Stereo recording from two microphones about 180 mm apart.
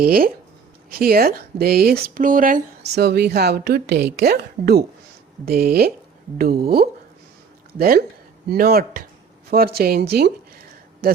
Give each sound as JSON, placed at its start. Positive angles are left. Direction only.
{"t": 0.0, "sound": "speech", "side_deg": -55}
{"t": 2.9, "sound": "speech", "side_deg": -65}
{"t": 11.0, "sound": "speech", "side_deg": -55}